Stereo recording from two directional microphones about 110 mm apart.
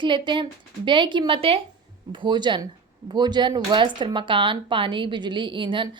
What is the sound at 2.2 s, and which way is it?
A woman's voice, 45° right (ahead or behind).